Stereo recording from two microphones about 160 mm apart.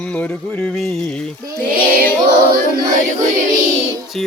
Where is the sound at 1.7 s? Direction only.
65° right (ahead or behind).